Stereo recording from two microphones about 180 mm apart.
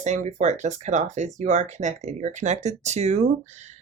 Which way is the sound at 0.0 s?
40° right (ahead or behind).